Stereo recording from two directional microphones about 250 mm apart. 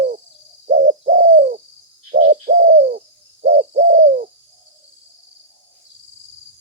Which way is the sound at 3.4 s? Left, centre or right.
Right.